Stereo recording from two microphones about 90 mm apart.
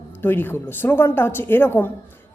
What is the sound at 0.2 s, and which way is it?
A woman's voice, 25° left (ahead or behind).